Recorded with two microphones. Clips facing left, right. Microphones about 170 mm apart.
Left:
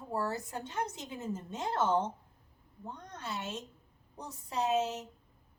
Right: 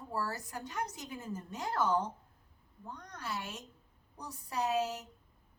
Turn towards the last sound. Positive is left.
turn(degrees=25)  # may be behind; listen again after turning